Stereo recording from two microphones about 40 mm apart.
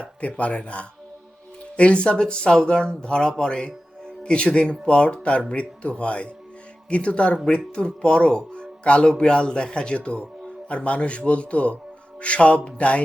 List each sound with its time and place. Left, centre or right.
0.2 s a man's voice: left